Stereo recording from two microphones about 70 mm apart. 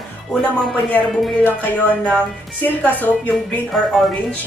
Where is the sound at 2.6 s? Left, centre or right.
Left.